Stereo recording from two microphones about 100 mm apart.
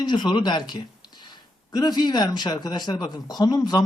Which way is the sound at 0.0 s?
50° left (ahead or behind).